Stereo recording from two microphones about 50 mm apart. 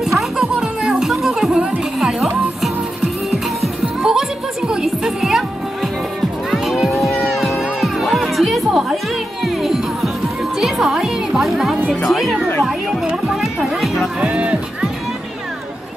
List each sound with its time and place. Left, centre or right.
0.0 s music: centre
6.5 s music: centre
14.2 s music: right